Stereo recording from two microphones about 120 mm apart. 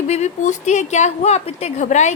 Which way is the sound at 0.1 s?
75° left (ahead or behind).